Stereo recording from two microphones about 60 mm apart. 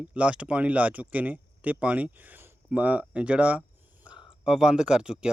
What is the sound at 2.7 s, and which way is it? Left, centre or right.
Speech, right.